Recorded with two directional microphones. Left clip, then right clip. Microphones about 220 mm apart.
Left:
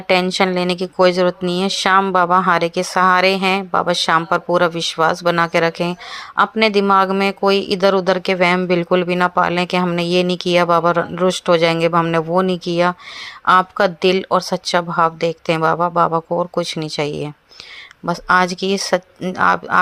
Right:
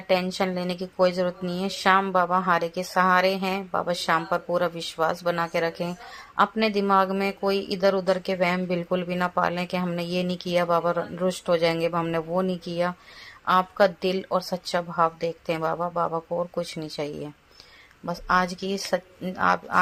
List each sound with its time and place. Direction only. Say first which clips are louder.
0.1 s speech: left 9 dB; 30° left (ahead or behind)